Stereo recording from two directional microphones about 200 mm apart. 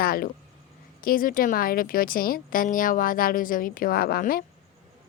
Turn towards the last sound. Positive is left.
turn(degrees=45)  # may be behind; listen again after turning